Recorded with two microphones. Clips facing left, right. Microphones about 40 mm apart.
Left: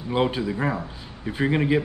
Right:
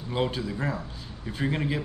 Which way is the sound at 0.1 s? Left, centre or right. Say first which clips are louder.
Left 5 dB; centre.